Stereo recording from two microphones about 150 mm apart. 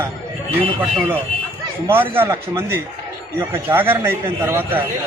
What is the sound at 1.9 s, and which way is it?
A man's voice, 15° right (ahead or behind).